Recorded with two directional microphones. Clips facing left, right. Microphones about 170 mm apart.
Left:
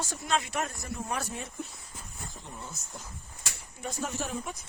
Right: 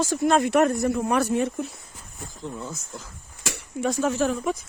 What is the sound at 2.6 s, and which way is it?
Speech, 90° right.